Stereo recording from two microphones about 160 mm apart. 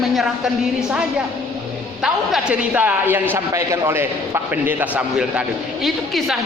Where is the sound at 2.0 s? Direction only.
5° right (ahead or behind).